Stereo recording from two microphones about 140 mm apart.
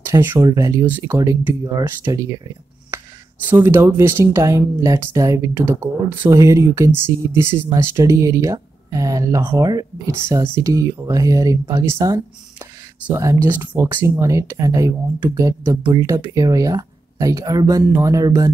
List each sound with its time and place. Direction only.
0.0 s speech: 15° right (ahead or behind)
3.4 s speech: 15° right (ahead or behind)
10.2 s speech: 20° right (ahead or behind)